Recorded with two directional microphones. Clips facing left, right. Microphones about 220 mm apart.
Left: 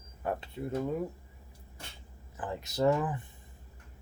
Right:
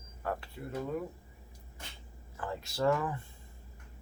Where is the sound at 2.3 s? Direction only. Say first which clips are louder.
Left 2 dB; 20° left (ahead or behind).